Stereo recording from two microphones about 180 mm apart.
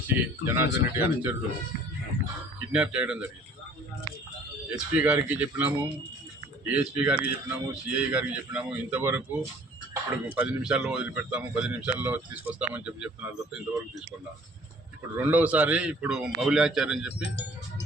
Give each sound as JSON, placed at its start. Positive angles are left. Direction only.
{"t": 0.4, "sound": "speech", "side_deg": -15}
{"t": 2.7, "sound": "a man's voice", "side_deg": -5}
{"t": 4.7, "sound": "speech", "side_deg": -10}
{"t": 15.2, "sound": "a man's voice", "side_deg": -10}
{"t": 17.2, "sound": "speech", "side_deg": 80}